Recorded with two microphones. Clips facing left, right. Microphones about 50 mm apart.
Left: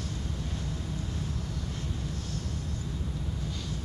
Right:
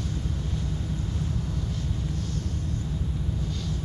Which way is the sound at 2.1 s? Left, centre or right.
Right.